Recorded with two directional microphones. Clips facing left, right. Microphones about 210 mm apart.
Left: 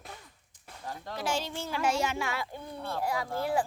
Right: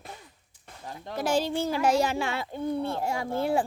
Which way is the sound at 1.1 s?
40° right (ahead or behind).